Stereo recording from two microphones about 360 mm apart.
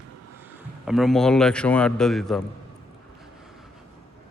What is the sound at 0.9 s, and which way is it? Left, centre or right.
Speech, centre.